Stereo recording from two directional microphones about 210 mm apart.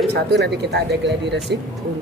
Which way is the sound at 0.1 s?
55° right (ahead or behind).